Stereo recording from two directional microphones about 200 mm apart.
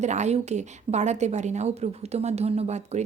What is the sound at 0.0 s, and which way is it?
Speech, 35° right (ahead or behind).